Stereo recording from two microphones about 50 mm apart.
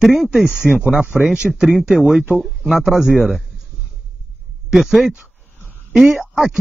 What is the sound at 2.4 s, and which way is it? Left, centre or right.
Speech, centre.